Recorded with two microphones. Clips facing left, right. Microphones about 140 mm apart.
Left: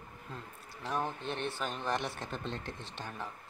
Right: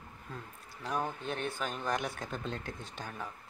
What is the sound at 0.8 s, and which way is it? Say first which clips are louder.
Speech: even; centre (ahead or behind).